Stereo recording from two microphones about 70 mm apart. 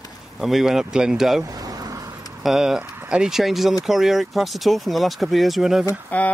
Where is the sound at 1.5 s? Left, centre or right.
Right.